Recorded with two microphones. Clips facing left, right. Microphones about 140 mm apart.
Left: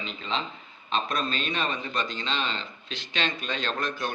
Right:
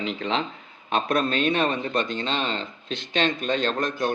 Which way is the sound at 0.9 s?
60° right (ahead or behind).